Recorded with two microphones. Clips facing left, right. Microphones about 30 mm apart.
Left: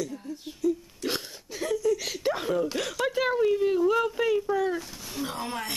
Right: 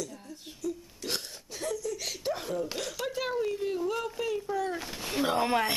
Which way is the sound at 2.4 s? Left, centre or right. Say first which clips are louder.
Left 6 dB; left.